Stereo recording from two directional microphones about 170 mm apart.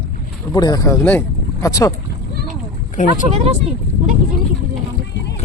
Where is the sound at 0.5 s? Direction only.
20° left (ahead or behind).